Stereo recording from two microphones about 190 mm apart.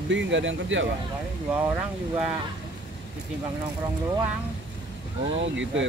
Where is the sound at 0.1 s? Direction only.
75° right (ahead or behind).